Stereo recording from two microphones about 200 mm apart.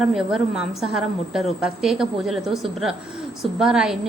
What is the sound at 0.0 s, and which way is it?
A woman's voice, centre (ahead or behind).